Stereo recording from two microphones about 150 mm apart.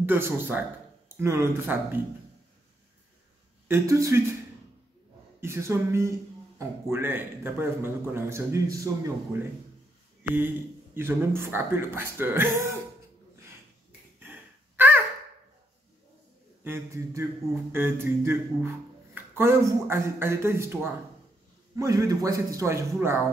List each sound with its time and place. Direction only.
0.0 s speech: 15° right (ahead or behind)
3.6 s speech: 15° right (ahead or behind)
5.4 s speech: 15° right (ahead or behind)
11.0 s speech: 15° right (ahead or behind)
16.6 s a man's voice: 20° right (ahead or behind)